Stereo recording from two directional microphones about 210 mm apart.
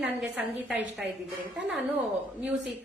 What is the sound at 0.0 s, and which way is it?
A woman's voice, 5° right (ahead or behind).